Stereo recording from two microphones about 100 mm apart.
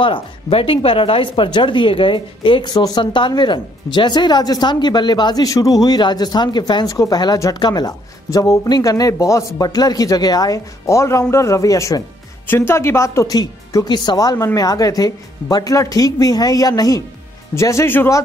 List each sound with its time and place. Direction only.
0.0 s speech: 65° left (ahead or behind)
2.7 s a man's voice: 40° left (ahead or behind); by 18.2 s 25° left (ahead or behind)